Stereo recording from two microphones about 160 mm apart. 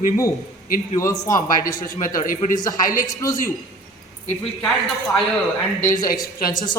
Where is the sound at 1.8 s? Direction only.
55° left (ahead or behind).